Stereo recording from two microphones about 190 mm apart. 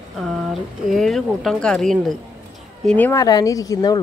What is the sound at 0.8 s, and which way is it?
Speech, centre (ahead or behind).